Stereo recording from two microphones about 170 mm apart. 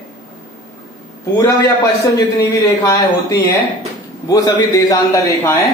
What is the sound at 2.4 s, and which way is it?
Speech, 20° left (ahead or behind).